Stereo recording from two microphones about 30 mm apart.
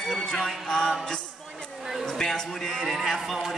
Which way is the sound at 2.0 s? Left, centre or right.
Left.